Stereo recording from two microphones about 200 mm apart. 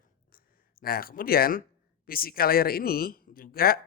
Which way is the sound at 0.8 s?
50° left (ahead or behind).